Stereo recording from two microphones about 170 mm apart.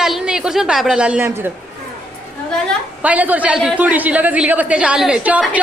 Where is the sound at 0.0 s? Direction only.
5° right (ahead or behind).